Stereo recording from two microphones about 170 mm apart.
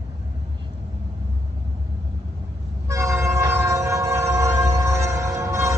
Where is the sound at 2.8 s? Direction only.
20° right (ahead or behind).